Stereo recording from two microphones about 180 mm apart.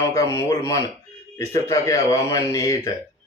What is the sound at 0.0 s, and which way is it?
A man's voice, 15° left (ahead or behind).